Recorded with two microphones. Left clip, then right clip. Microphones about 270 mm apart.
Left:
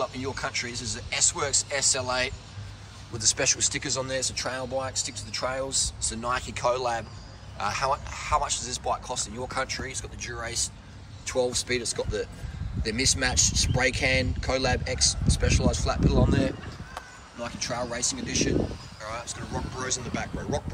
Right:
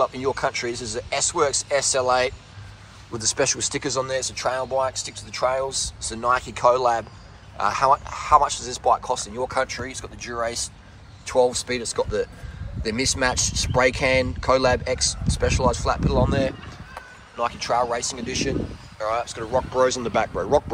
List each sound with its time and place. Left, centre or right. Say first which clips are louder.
0.0 s speech: right 8 dB; centre